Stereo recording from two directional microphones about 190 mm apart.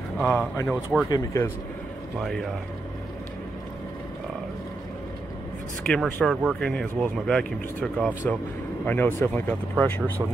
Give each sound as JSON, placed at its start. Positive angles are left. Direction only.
{"t": 0.2, "sound": "speech", "side_deg": 10}
{"t": 2.1, "sound": "speech", "side_deg": 0}
{"t": 5.9, "sound": "speech", "side_deg": 5}